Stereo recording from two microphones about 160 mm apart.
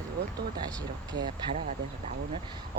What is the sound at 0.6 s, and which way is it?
Speech, 25° right (ahead or behind).